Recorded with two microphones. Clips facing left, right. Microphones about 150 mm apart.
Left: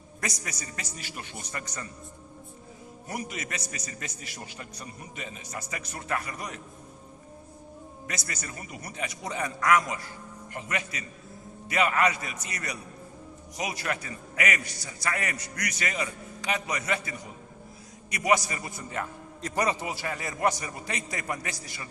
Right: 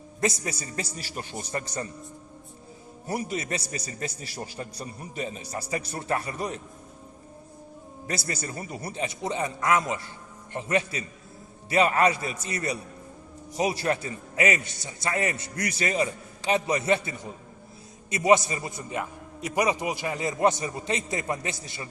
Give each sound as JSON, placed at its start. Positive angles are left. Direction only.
{"t": 0.2, "sound": "a man's voice", "side_deg": -30}
{"t": 3.1, "sound": "a man's voice", "side_deg": -30}
{"t": 8.0, "sound": "a man's voice", "side_deg": -30}